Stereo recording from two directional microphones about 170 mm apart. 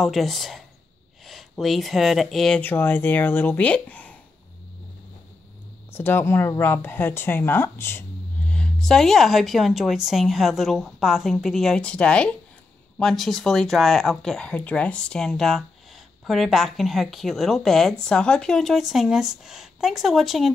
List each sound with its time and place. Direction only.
0.0 s speech: centre (ahead or behind)
5.9 s speech: 15° left (ahead or behind)